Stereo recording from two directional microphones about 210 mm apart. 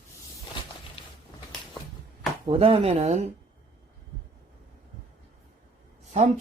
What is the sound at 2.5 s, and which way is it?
Speech, 25° right (ahead or behind).